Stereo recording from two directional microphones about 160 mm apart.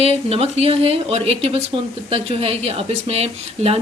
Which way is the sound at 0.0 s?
40° right (ahead or behind).